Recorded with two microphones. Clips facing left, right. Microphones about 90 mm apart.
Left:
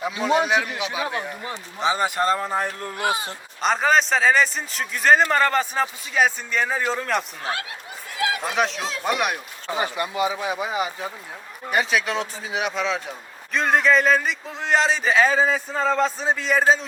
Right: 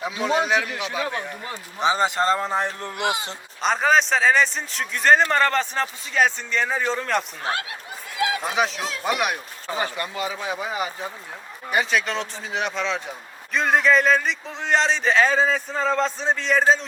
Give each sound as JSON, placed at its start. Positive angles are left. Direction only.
{"t": 0.0, "sound": "a man's voice", "side_deg": 0}
{"t": 1.8, "sound": "speech", "side_deg": -20}
{"t": 3.6, "sound": "a man's voice", "side_deg": 0}
{"t": 8.5, "sound": "a man's voice", "side_deg": 0}
{"t": 9.7, "sound": "a man's voice", "side_deg": 15}